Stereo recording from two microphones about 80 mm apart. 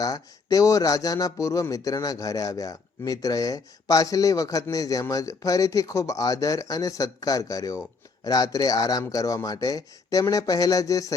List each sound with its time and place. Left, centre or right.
0.0 s speech: left